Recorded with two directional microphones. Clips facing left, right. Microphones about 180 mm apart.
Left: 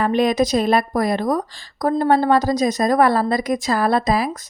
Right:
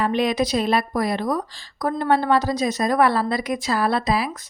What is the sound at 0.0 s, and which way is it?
A woman's voice, 45° left (ahead or behind).